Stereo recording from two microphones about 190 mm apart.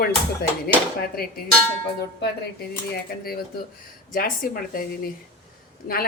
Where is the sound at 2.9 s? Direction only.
55° left (ahead or behind).